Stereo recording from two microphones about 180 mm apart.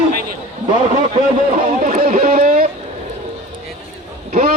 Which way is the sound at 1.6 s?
45° right (ahead or behind).